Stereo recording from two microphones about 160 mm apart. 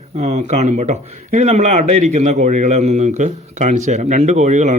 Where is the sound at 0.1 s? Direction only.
45° right (ahead or behind).